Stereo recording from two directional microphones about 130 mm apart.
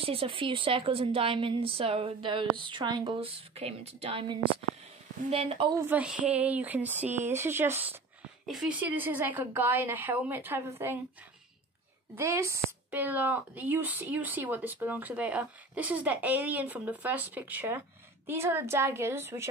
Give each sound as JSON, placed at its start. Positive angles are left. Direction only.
{"t": 0.0, "sound": "a woman's voice", "side_deg": -45}
{"t": 5.9, "sound": "a woman's voice", "side_deg": -10}
{"t": 8.5, "sound": "a woman's voice", "side_deg": -5}
{"t": 12.2, "sound": "a woman's voice", "side_deg": -20}